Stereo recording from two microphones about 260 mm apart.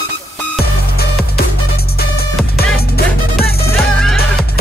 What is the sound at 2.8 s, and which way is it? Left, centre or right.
Music, left.